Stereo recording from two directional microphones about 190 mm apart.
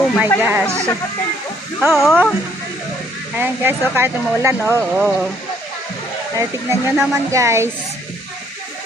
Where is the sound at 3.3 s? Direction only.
10° right (ahead or behind).